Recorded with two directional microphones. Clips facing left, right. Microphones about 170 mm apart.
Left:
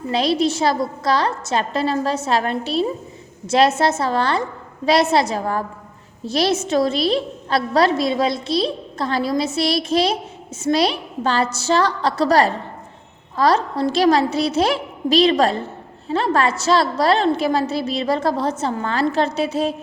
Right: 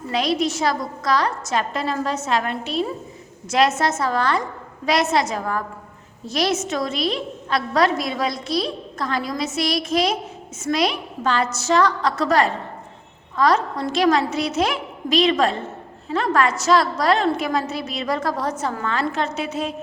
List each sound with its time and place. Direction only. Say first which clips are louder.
0.1 s a woman's voice: left 3 dB; 30° left (ahead or behind)